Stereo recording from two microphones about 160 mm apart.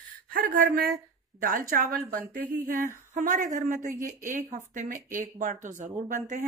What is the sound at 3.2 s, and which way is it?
Speech, 55° right (ahead or behind).